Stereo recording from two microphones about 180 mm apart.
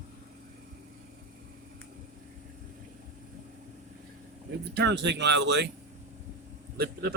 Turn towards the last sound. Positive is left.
turn(degrees=-60)  # may be behind; listen again after turning